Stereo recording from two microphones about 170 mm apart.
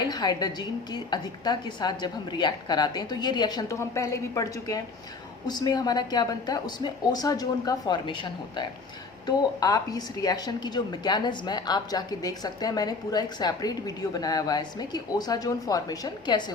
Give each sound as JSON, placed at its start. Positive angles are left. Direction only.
{"t": 0.1, "sound": "a woman's voice", "side_deg": 25}